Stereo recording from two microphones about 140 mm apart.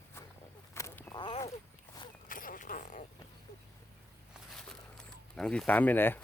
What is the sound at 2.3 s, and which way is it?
Zipper, 80° left.